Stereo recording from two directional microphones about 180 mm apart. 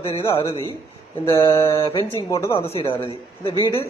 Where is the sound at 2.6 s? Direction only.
35° left (ahead or behind).